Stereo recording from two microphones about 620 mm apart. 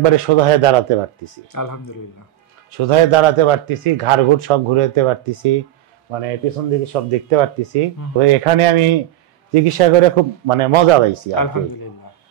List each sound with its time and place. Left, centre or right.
0.0 s speech: right
1.5 s speech: left
2.8 s speech: right
11.3 s speech: left